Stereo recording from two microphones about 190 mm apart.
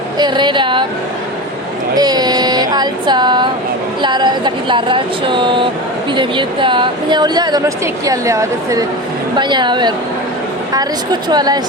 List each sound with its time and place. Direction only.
0.2 s vehicle: 25° right (ahead or behind)
2.0 s vehicle: 20° right (ahead or behind)
8.0 s speech: 15° right (ahead or behind)
9.4 s vehicle: 25° right (ahead or behind)